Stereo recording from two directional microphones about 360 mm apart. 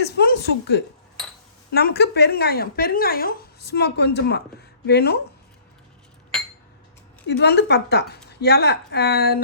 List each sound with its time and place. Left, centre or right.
0.2 s speech: left
7.3 s speech: left